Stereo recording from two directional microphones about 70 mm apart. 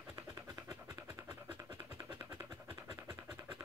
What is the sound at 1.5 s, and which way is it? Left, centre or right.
Scratch, right.